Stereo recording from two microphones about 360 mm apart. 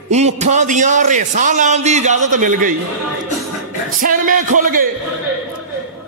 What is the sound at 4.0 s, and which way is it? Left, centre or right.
Speech, right.